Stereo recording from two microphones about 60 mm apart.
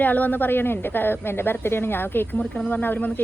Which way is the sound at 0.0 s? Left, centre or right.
Left.